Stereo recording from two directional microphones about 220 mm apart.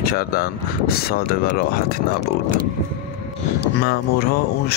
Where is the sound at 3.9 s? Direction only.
45° left (ahead or behind).